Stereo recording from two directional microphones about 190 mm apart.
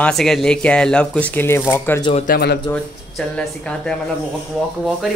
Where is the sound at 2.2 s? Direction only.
55° left (ahead or behind).